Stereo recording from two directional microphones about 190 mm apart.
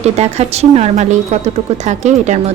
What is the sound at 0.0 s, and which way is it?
A woman's voice, 35° right (ahead or behind).